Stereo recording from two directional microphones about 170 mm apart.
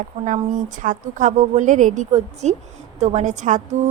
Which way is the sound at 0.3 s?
50° right (ahead or behind).